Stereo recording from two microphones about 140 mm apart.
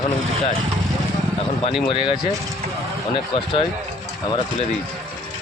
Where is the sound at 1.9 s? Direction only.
35° left (ahead or behind).